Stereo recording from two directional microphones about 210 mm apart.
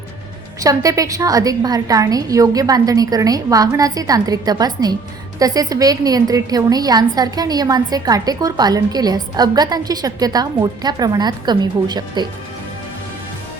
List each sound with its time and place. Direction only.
0.6 s a woman's voice: 15° right (ahead or behind)